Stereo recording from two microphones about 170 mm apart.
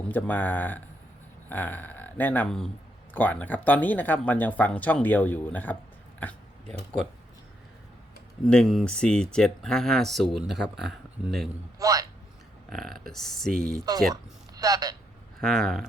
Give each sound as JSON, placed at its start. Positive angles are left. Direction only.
{"t": 0.1, "sound": "speech", "side_deg": 10}
{"t": 8.4, "sound": "speech", "side_deg": 5}
{"t": 11.8, "sound": "a man's voice", "side_deg": -20}
{"t": 12.7, "sound": "speech", "side_deg": 0}
{"t": 14.1, "sound": "speech", "side_deg": -20}
{"t": 15.4, "sound": "speech", "side_deg": 0}